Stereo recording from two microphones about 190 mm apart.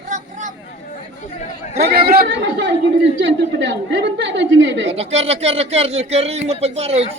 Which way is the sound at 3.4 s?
70° right (ahead or behind).